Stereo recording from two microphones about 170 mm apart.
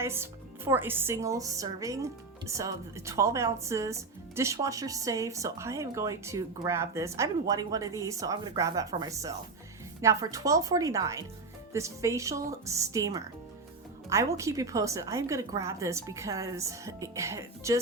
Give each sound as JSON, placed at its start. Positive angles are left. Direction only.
{"t": 0.0, "sound": "a woman's voice", "side_deg": -15}